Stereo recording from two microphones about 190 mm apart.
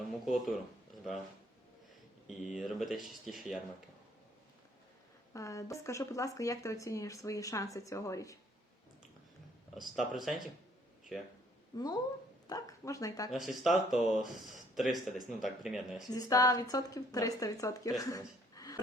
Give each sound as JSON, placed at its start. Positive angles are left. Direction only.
{"t": 0.1, "sound": "speech", "side_deg": 0}
{"t": 2.4, "sound": "speech", "side_deg": 0}
{"t": 5.3, "sound": "speech", "side_deg": 15}
{"t": 9.7, "sound": "speech", "side_deg": 0}
{"t": 11.7, "sound": "speech", "side_deg": 20}
{"t": 13.3, "sound": "speech", "side_deg": 0}
{"t": 16.0, "sound": "speech", "side_deg": 20}